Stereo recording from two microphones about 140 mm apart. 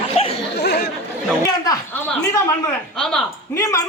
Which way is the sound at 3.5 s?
20° left (ahead or behind).